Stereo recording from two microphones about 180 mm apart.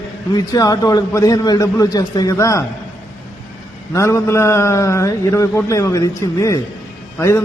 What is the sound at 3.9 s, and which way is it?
A man's voice, 15° left (ahead or behind).